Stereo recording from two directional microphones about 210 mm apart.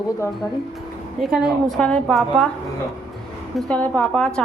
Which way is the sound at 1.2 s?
Centre (ahead or behind).